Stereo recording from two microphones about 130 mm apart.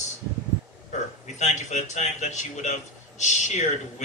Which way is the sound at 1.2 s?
65° left (ahead or behind).